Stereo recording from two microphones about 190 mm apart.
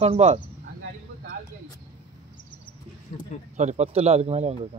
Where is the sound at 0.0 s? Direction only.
35° right (ahead or behind).